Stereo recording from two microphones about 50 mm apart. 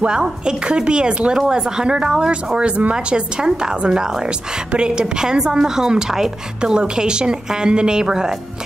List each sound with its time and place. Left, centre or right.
0.0 s a woman's voice: centre